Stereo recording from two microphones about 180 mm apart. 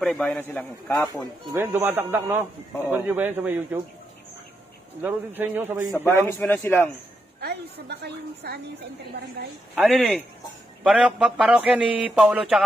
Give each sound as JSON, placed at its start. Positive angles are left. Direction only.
{"t": 0.0, "sound": "a man's voice", "side_deg": 5}
{"t": 1.5, "sound": "a man's voice", "side_deg": -10}
{"t": 5.0, "sound": "a man's voice", "side_deg": -10}
{"t": 6.4, "sound": "a man's voice", "side_deg": 10}
{"t": 7.3, "sound": "a woman's voice", "side_deg": -65}
{"t": 9.8, "sound": "a man's voice", "side_deg": 0}